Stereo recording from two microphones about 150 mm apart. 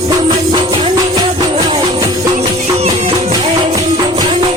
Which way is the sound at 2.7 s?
50° right (ahead or behind).